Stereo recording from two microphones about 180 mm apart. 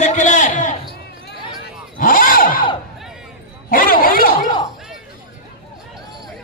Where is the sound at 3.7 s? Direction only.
50° left (ahead or behind).